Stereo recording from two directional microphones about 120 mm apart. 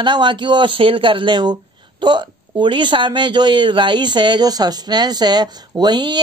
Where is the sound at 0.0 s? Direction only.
40° right (ahead or behind).